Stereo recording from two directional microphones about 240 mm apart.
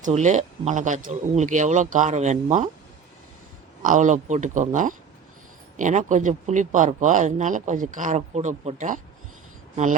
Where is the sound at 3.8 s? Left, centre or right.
Right.